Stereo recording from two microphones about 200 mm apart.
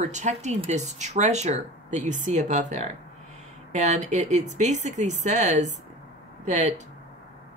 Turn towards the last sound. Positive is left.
turn(degrees=-35)  # may be behind; listen again after turning